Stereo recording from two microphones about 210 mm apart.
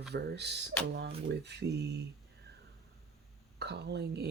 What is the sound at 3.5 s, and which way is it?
Speech, 50° right (ahead or behind).